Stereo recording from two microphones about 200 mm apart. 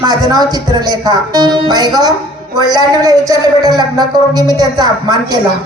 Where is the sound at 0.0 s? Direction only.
20° right (ahead or behind).